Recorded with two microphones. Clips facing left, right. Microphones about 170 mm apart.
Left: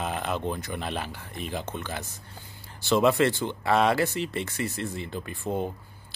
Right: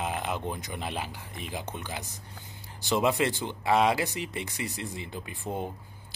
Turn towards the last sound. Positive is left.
turn(degrees=20)  # may be behind; listen again after turning